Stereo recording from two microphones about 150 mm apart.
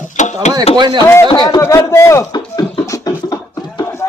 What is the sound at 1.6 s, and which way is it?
Beatboxing, 20° left (ahead or behind).